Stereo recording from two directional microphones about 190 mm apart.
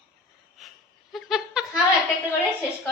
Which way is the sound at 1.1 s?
Centre (ahead or behind).